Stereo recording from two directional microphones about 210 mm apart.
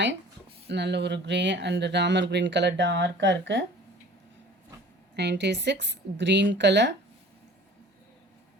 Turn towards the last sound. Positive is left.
turn(degrees=-55)  # may be behind; listen again after turning